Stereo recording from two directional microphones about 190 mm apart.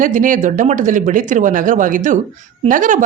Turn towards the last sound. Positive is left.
turn(degrees=-40)  # may be behind; listen again after turning